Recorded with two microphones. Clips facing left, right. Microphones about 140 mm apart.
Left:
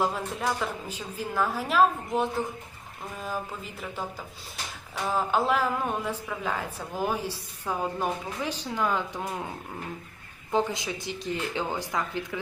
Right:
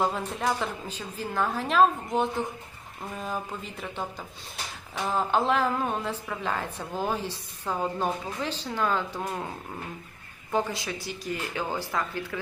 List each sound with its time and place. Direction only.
0.0 s a woman's voice: centre (ahead or behind)
5.0 s a woman's voice: 5° left (ahead or behind)
10.5 s a woman's voice: 20° left (ahead or behind)